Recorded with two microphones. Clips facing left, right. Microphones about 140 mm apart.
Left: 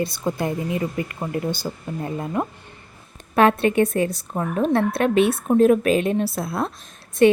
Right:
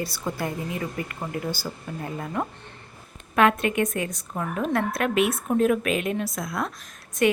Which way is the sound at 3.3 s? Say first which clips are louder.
Left 4 dB; 30° left (ahead or behind).